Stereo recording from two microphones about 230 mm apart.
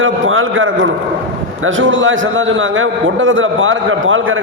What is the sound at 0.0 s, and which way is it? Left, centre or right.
A man's voice, right.